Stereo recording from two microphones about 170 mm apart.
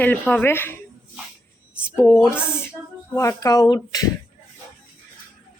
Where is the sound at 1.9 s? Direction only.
15° left (ahead or behind).